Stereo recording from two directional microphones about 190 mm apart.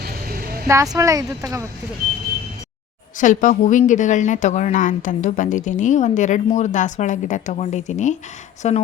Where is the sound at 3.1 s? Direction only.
40° left (ahead or behind).